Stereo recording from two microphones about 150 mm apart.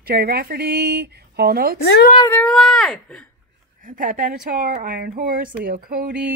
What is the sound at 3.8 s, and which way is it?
Speech, 65° right (ahead or behind).